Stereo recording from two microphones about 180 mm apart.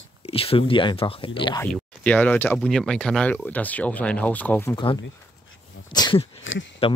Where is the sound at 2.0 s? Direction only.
10° left (ahead or behind).